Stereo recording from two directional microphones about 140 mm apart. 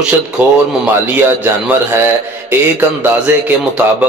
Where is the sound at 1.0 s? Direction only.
15° right (ahead or behind).